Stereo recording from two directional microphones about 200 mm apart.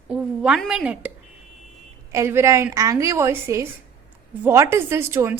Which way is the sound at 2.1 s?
15° right (ahead or behind).